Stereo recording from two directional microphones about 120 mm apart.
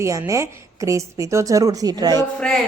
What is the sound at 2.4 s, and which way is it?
Music, 5° left (ahead or behind).